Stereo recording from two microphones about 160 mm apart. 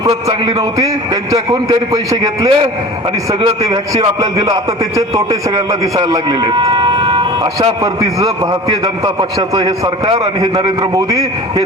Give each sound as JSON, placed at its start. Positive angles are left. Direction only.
{"t": 0.4, "sound": "a man's voice", "side_deg": -25}
{"t": 9.6, "sound": "a man's voice", "side_deg": -25}